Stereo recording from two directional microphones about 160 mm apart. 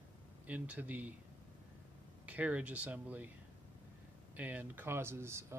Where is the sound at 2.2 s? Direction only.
10° right (ahead or behind).